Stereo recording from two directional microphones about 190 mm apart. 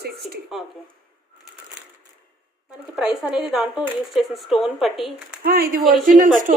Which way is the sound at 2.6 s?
5° right (ahead or behind).